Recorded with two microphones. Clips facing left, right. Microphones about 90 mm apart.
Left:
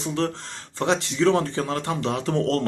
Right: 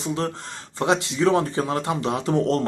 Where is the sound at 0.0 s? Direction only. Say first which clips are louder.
Even; 5° right (ahead or behind).